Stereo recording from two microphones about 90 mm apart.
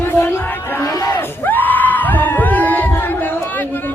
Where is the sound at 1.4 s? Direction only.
20° left (ahead or behind).